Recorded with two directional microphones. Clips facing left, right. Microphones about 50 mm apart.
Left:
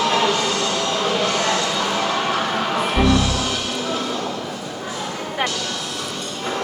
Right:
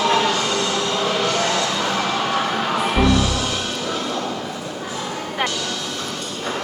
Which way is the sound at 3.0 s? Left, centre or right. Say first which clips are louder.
Even; centre.